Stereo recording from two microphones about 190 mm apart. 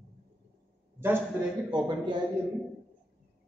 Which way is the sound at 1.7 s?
25° right (ahead or behind).